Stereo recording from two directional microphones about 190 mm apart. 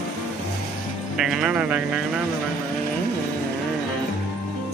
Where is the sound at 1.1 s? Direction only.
5° right (ahead or behind).